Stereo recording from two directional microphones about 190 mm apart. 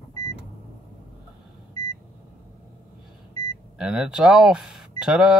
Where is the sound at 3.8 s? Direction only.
5° right (ahead or behind).